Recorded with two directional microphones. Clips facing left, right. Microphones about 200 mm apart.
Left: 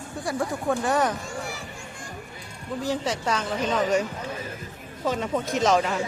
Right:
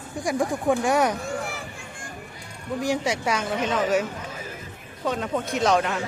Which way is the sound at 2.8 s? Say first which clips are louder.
Right 2 dB; 10° right (ahead or behind).